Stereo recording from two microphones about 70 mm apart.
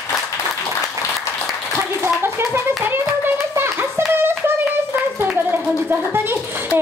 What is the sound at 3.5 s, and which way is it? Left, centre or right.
Hands, right.